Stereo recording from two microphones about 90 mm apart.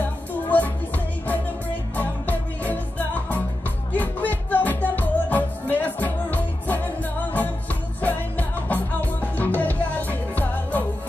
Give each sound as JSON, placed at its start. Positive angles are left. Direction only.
{"t": 0.0, "sound": "music", "side_deg": 20}